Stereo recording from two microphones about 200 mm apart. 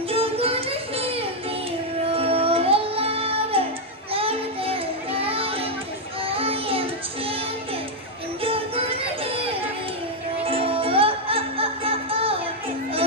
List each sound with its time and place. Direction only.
0.1 s music: 30° right (ahead or behind)
4.1 s children playing: 30° right (ahead or behind)
6.2 s music: 30° right (ahead or behind)
8.5 s music: 30° right (ahead or behind)